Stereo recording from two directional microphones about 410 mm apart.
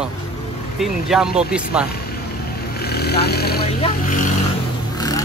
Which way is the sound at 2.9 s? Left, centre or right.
Left.